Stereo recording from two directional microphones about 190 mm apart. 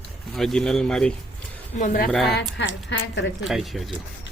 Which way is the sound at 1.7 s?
45° left (ahead or behind).